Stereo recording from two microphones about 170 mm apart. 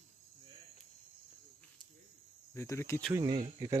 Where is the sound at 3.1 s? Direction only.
25° right (ahead or behind).